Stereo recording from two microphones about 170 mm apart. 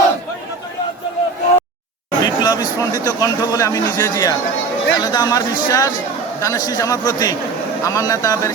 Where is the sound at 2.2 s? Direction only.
25° left (ahead or behind).